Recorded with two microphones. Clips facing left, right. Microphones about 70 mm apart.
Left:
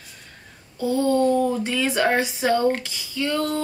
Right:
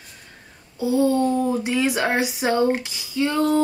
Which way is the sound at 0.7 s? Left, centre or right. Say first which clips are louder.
Right 1 dB; centre.